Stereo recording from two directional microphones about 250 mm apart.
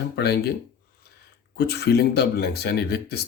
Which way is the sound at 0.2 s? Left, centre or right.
Left.